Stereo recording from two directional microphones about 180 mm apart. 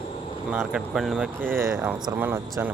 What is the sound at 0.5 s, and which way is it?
Speech, 5° right (ahead or behind).